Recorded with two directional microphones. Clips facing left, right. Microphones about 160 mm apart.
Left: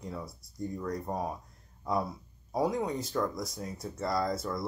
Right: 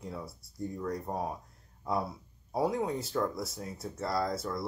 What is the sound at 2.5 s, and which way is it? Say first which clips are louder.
Speech: even; 5° right (ahead or behind).